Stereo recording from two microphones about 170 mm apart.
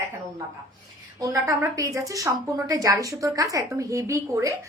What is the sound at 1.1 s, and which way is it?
A woman's voice, 20° right (ahead or behind).